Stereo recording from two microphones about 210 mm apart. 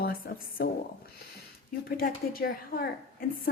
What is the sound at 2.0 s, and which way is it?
Speech, 45° left (ahead or behind).